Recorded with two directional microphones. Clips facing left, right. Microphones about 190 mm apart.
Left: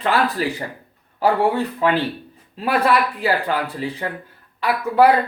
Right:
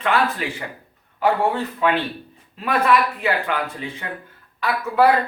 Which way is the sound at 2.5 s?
35° left (ahead or behind).